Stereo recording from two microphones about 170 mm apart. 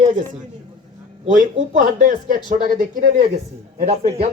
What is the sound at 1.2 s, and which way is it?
Speech, 50° right (ahead or behind).